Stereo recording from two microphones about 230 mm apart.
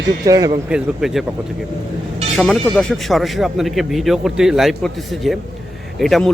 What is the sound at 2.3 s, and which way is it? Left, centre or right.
Speech, centre.